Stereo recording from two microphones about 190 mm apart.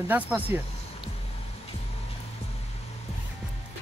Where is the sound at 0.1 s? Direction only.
10° right (ahead or behind).